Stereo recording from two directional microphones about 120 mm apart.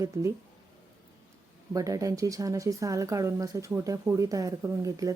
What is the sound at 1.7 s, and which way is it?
Speech, 30° right (ahead or behind).